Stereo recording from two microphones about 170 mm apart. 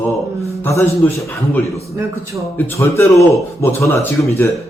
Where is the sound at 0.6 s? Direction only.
15° left (ahead or behind).